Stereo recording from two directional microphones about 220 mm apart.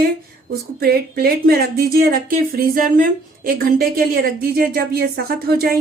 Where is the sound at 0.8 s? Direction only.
45° right (ahead or behind).